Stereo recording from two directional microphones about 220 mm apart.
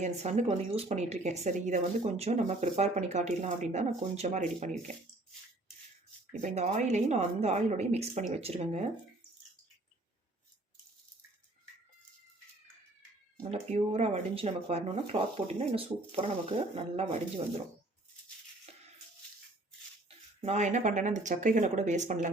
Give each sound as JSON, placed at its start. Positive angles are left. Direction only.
{"t": 0.0, "sound": "speech", "side_deg": -30}
{"t": 6.3, "sound": "speech", "side_deg": -30}
{"t": 13.5, "sound": "speech", "side_deg": -30}
{"t": 18.7, "sound": "music", "side_deg": -30}
{"t": 20.1, "sound": "speech", "side_deg": -30}